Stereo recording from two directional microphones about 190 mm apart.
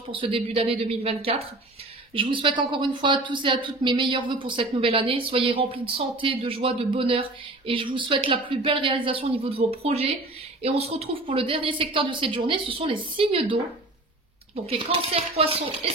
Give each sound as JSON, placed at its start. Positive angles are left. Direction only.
{"t": 0.1, "sound": "speech", "side_deg": -30}